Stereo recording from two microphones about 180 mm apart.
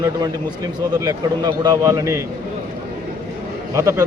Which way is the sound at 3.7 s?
15° right (ahead or behind).